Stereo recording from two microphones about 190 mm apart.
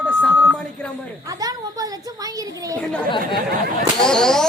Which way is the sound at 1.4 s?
20° right (ahead or behind).